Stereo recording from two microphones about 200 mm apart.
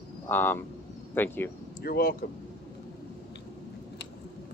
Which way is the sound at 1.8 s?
50° left (ahead or behind).